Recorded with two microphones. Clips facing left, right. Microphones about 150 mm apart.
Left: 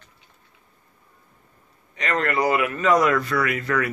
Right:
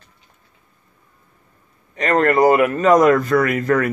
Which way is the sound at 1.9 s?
45° right (ahead or behind).